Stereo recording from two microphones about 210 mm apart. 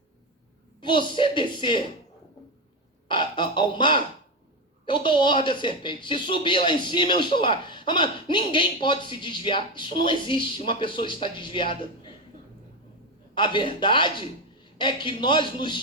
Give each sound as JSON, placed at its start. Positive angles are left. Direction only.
{"t": 0.8, "sound": "speech", "side_deg": 20}
{"t": 3.1, "sound": "speech", "side_deg": 20}
{"t": 13.3, "sound": "speech", "side_deg": 20}